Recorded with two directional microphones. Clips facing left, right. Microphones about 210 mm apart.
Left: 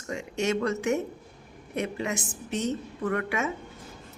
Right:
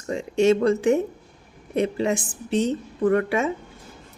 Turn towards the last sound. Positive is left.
turn(degrees=-30)  # may be behind; listen again after turning